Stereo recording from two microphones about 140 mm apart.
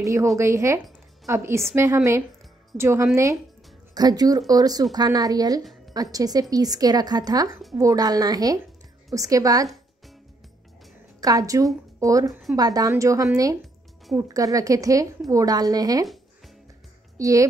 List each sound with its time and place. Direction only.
0.0 s speech: 20° right (ahead or behind)
2.8 s speech: 20° right (ahead or behind)
5.6 s music: centre (ahead or behind)
6.1 s speech: 25° right (ahead or behind)
11.1 s a woman's voice: 25° right (ahead or behind)
17.2 s speech: 25° right (ahead or behind)